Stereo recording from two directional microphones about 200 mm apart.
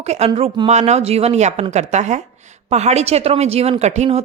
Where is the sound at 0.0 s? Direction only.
30° right (ahead or behind).